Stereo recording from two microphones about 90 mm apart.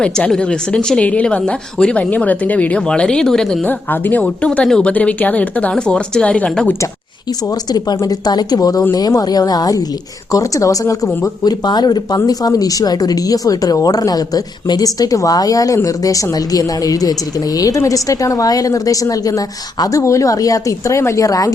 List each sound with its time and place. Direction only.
0.0 s speech: 10° left (ahead or behind)
3.7 s speech: 20° left (ahead or behind)
7.7 s speech: 50° left (ahead or behind)